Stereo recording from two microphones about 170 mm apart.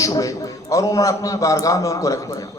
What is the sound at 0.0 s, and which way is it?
A man's voice, 20° left (ahead or behind).